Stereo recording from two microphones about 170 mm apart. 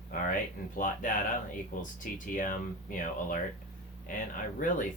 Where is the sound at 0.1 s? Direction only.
55° left (ahead or behind).